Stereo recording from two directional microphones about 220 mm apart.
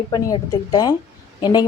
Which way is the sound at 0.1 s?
15° left (ahead or behind).